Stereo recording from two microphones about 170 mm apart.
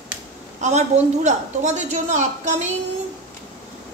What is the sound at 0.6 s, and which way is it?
A woman's voice, 45° right (ahead or behind).